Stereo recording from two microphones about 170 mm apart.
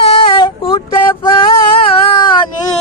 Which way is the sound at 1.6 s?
30° left (ahead or behind).